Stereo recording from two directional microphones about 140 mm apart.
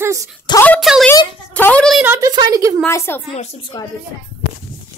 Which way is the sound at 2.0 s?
15° right (ahead or behind).